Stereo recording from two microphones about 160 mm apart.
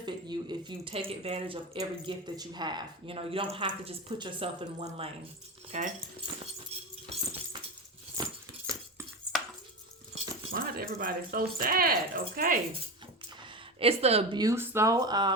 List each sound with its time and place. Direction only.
0.0 s speech: 30° right (ahead or behind); by 5.9 s 45° right (ahead or behind)
8.7 s cutlery: 20° right (ahead or behind)
10.5 s speech: 70° right (ahead or behind)
13.7 s speech: 40° right (ahead or behind)
14.3 s speech: 20° right (ahead or behind)